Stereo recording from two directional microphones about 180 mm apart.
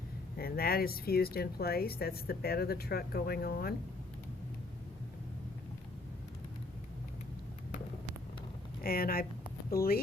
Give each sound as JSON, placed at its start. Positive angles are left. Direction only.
{"t": 0.3, "sound": "speech", "side_deg": 55}
{"t": 8.8, "sound": "a woman's voice", "side_deg": 55}